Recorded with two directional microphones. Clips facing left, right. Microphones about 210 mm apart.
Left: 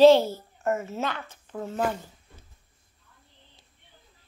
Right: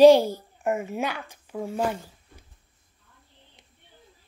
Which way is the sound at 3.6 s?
20° right (ahead or behind).